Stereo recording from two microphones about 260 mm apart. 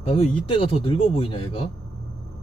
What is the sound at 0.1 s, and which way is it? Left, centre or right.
Speech, centre.